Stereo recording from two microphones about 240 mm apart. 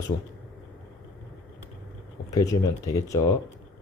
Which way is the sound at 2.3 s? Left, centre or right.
Centre.